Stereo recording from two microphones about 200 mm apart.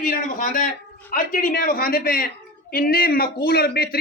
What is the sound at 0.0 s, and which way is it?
A man's voice, 40° left (ahead or behind).